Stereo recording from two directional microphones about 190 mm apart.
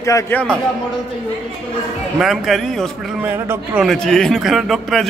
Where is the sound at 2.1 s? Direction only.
Centre (ahead or behind).